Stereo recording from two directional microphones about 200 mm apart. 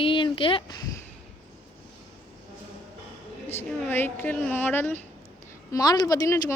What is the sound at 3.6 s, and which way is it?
A woman's voice, 10° left (ahead or behind).